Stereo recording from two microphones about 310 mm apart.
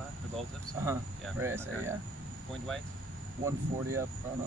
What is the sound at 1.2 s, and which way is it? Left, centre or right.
Speech, centre.